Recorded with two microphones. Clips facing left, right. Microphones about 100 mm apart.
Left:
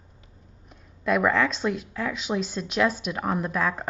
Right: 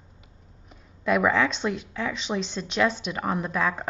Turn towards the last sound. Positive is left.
turn(degrees=0)  # may be behind; listen again after turning